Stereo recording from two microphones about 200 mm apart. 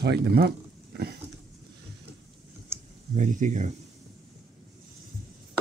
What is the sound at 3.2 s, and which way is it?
Speech, 40° right (ahead or behind).